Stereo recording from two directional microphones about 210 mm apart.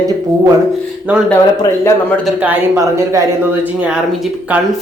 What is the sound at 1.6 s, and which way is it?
Speech, 15° left (ahead or behind).